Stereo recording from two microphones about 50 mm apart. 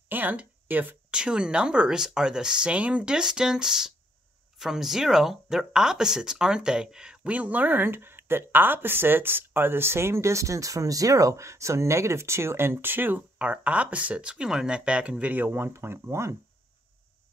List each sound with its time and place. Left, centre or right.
0.1 s speech: right
1.1 s speech: centre
7.2 s speech: right
13.4 s speech: right
15.3 s speech: right